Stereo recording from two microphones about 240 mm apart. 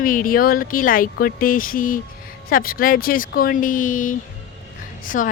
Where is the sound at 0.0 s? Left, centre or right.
Left.